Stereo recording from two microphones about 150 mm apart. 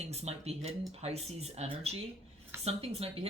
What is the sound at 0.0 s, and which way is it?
Speech, 45° right (ahead or behind).